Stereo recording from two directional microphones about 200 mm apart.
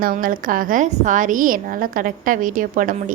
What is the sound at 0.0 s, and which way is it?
A woman's voice, 45° right (ahead or behind).